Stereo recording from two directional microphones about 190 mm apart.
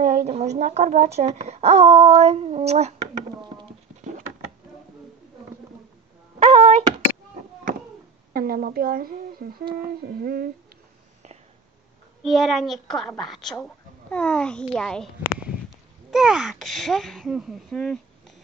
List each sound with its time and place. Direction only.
0.0 s a child's voice: 40° right (ahead or behind)
6.4 s a sound: 35° right (ahead or behind)
8.3 s speech: 50° right (ahead or behind)
12.2 s speech: centre (ahead or behind)